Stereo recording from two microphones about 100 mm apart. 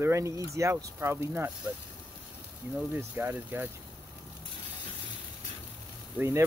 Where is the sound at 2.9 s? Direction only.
20° right (ahead or behind).